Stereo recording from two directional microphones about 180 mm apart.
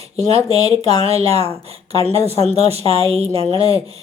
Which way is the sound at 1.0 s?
35° right (ahead or behind).